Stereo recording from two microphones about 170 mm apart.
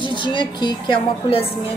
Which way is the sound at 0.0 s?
30° left (ahead or behind).